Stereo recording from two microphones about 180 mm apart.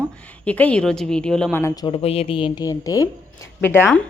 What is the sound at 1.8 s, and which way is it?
A woman's voice, 35° left (ahead or behind).